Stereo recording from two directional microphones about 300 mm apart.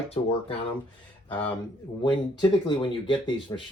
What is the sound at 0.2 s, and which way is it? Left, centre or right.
Speech, centre.